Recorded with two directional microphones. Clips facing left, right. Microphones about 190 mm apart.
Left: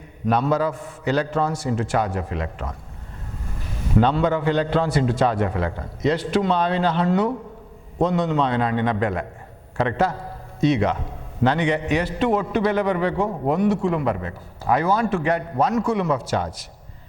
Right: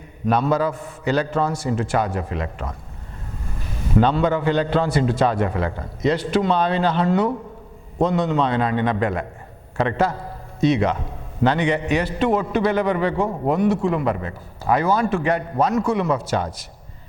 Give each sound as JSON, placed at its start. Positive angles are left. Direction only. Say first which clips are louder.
{"t": 0.3, "sound": "a man's voice", "louder": "right 1 dB", "side_deg": -15}
{"t": 4.0, "sound": "a man's voice", "louder": "right 1 dB", "side_deg": -15}
{"t": 9.7, "sound": "a sound", "louder": "right 1 dB", "side_deg": -20}
{"t": 10.7, "sound": "a man's voice", "louder": "right 1 dB", "side_deg": -15}
{"t": 13.2, "sound": "a man's voice", "louder": "right 1 dB", "side_deg": -35}
{"t": 13.5, "sound": "a man's voice", "louder": "right 1 dB", "side_deg": -15}